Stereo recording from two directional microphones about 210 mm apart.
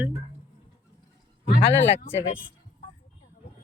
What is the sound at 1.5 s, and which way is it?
Speech, 55° left (ahead or behind).